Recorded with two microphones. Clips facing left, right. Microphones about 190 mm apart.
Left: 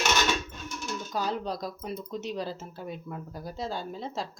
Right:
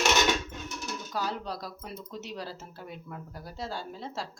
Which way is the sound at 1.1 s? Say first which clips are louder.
Left 3 dB; 20° left (ahead or behind).